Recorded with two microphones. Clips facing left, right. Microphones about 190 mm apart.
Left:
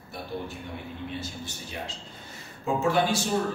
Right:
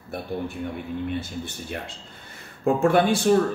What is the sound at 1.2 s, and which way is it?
Speech, 55° right (ahead or behind).